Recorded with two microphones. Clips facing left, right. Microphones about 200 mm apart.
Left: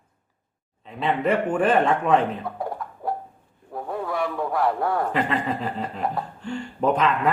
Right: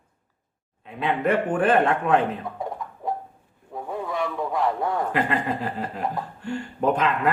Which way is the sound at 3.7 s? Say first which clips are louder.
Left 1 dB; 5° left (ahead or behind).